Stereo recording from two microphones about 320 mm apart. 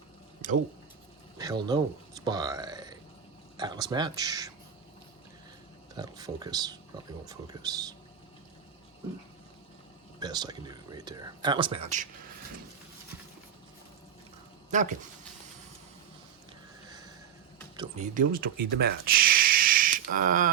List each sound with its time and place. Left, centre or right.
1.4 s speech: centre
5.9 s speech: centre
10.2 s speech: centre
14.7 s speech: right
17.7 s speech: right